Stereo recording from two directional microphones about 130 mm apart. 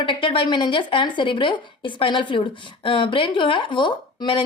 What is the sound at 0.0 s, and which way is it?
A woman's voice, 40° left (ahead or behind).